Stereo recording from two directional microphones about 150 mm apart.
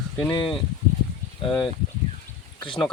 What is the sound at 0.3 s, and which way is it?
Speech, 30° left (ahead or behind).